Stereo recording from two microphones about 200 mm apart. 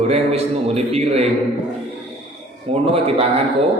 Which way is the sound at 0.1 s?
30° right (ahead or behind).